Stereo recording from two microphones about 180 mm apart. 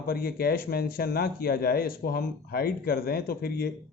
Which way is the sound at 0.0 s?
55° left (ahead or behind).